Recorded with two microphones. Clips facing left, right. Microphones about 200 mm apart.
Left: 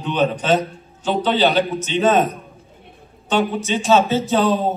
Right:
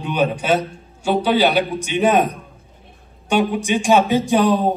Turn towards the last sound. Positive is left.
turn(degrees=-15)  # may be behind; listen again after turning